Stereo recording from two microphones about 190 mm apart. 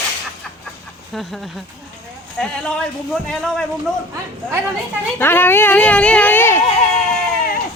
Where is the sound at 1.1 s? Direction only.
Centre (ahead or behind).